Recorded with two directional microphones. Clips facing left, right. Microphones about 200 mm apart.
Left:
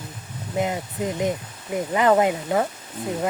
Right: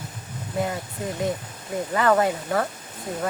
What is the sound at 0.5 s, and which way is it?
Speech, 20° left (ahead or behind).